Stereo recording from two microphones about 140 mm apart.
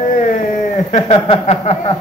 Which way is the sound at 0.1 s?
60° left (ahead or behind).